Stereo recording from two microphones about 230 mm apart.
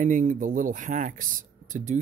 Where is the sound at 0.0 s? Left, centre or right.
Right.